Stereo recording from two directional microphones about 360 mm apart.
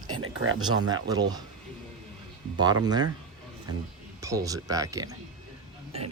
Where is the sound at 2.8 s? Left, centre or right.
Centre.